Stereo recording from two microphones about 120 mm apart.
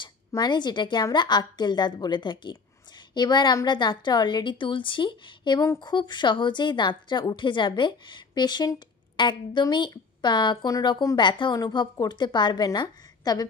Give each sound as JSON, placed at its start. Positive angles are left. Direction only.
{"t": 0.3, "sound": "speech", "side_deg": 35}